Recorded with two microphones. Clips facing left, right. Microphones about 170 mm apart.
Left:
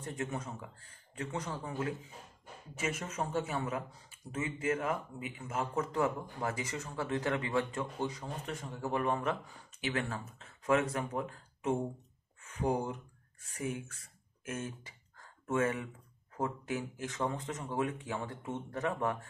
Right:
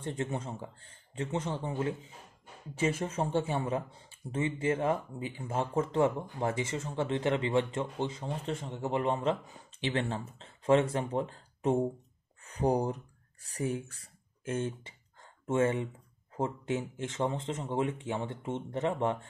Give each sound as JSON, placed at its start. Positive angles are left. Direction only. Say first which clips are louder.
{"t": 0.0, "sound": "speech", "louder": "right 4 dB", "side_deg": -30}